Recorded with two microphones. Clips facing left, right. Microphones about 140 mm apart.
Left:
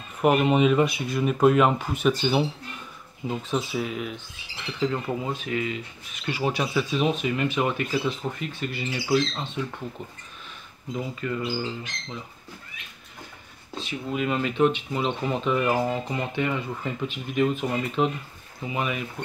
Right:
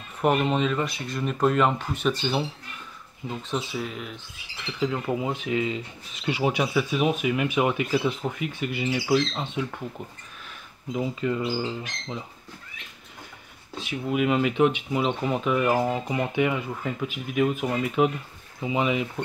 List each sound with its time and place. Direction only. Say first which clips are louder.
0.2 s speech: left 3 dB; 5° left (ahead or behind)
4.7 s speech: even; 5° right (ahead or behind)
10.9 s speech: right 3 dB; 15° right (ahead or behind)
13.7 s speech: right 3 dB; 10° right (ahead or behind)